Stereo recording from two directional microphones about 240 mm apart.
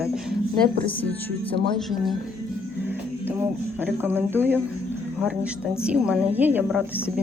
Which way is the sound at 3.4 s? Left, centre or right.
Centre.